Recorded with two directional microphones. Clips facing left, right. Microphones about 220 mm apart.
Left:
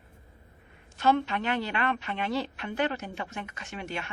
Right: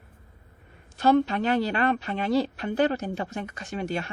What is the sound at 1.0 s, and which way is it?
A woman's voice, 40° right (ahead or behind).